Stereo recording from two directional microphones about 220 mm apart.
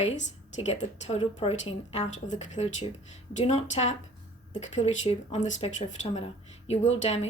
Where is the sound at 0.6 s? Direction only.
30° left (ahead or behind).